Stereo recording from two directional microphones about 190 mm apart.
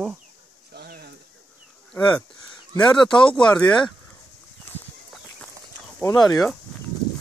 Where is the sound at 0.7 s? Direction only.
55° right (ahead or behind).